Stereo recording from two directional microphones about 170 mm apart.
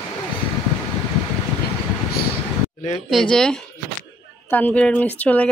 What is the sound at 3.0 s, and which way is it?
Speech, centre (ahead or behind).